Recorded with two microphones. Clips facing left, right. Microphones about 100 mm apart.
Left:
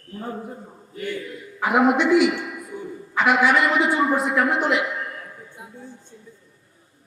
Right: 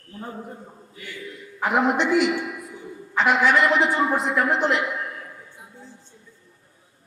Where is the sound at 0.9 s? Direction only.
50° left (ahead or behind).